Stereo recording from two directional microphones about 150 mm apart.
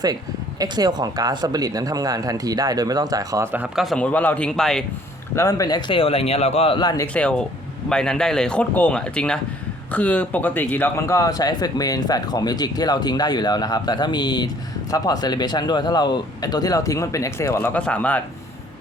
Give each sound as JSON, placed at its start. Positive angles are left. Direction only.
{"t": 0.6, "sound": "speech", "side_deg": -25}
{"t": 3.8, "sound": "speech", "side_deg": 5}
{"t": 5.4, "sound": "a man's voice", "side_deg": 20}
{"t": 6.7, "sound": "speech", "side_deg": 25}
{"t": 7.1, "sound": "speech", "side_deg": 10}